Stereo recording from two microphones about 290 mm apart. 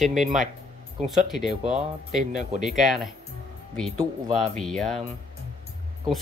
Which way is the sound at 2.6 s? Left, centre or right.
Centre.